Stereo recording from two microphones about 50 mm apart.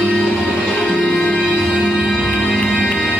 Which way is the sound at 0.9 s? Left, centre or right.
Centre.